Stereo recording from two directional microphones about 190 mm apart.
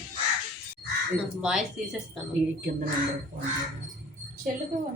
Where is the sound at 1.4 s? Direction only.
5° right (ahead or behind).